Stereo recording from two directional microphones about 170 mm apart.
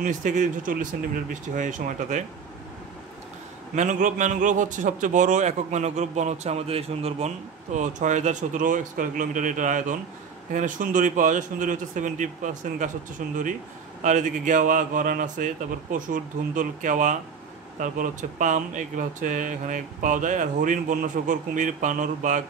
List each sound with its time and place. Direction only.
0.0 s a man's voice: 50° right (ahead or behind)
3.7 s a man's voice: 45° right (ahead or behind)